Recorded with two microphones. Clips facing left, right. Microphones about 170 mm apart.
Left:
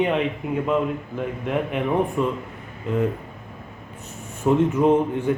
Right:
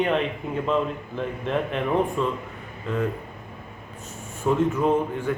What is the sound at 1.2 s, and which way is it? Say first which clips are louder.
Speech: even; 10° left (ahead or behind).